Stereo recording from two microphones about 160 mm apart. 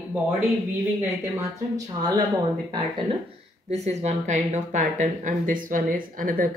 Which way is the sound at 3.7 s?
45° right (ahead or behind).